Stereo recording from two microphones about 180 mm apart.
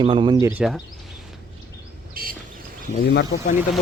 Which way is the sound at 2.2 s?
55° right (ahead or behind).